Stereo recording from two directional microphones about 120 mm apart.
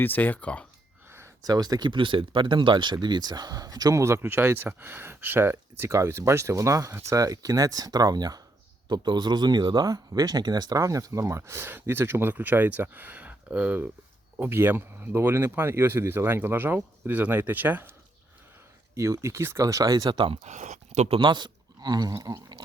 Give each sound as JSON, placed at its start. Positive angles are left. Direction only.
{"t": 0.0, "sound": "speech", "side_deg": 15}
{"t": 1.0, "sound": "a sound", "side_deg": -20}
{"t": 1.5, "sound": "speech", "side_deg": -35}
{"t": 18.9, "sound": "speech", "side_deg": -25}
{"t": 20.4, "sound": "speech", "side_deg": -75}
{"t": 21.2, "sound": "speech", "side_deg": -40}